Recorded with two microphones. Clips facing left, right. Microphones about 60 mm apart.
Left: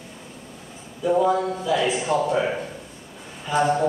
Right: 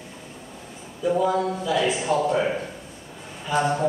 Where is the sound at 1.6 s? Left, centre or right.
Centre.